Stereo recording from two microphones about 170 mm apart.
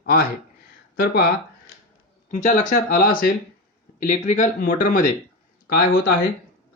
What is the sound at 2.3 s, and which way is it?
Speech, 45° left (ahead or behind).